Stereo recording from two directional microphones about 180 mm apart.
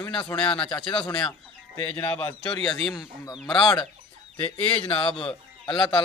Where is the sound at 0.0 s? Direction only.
25° left (ahead or behind).